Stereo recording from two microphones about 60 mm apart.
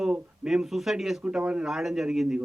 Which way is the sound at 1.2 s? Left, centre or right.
Centre.